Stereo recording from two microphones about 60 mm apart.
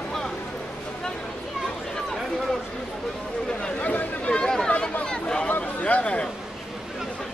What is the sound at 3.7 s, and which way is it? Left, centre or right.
Chatter, left.